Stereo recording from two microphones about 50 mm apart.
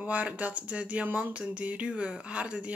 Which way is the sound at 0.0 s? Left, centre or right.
Right.